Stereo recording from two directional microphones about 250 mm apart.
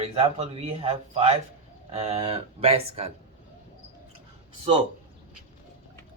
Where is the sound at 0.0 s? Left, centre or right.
Right.